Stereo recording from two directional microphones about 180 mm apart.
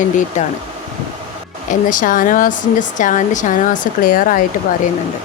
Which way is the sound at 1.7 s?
45° left (ahead or behind).